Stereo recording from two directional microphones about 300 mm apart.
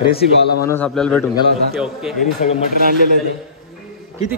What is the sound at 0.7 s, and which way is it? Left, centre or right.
A man's voice, centre.